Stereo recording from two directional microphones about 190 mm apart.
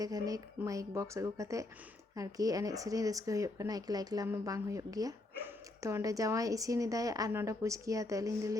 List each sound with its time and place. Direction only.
0.0 s speech: 20° right (ahead or behind)